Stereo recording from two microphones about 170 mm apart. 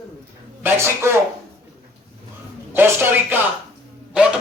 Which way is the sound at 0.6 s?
15° right (ahead or behind).